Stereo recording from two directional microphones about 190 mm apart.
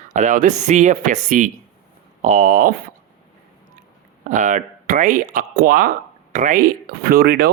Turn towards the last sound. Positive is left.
turn(degrees=-55)  # may be behind; listen again after turning